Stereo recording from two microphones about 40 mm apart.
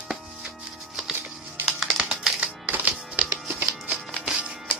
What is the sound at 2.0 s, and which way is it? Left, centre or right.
Typing, centre.